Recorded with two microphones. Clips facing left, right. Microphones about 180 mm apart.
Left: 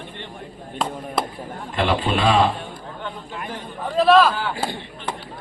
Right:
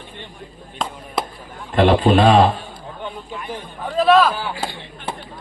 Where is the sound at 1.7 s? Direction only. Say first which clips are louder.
Right 8 dB; 40° right (ahead or behind).